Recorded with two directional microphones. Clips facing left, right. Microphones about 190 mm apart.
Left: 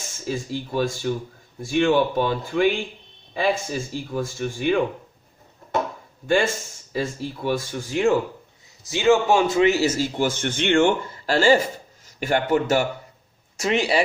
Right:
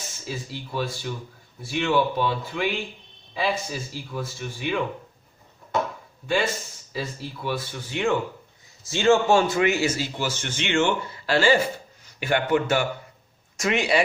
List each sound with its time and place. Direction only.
0.3 s speech: 45° left (ahead or behind)
6.2 s speech: 45° left (ahead or behind)
8.9 s a man's voice: 15° left (ahead or behind)
9.8 s a man's voice: 45° left (ahead or behind)